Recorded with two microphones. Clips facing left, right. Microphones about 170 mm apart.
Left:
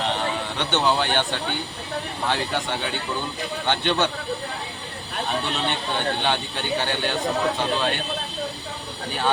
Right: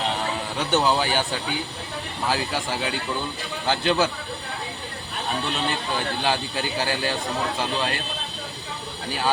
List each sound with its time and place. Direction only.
0.6 s speech: 5° right (ahead or behind)
5.6 s speech: 5° right (ahead or behind)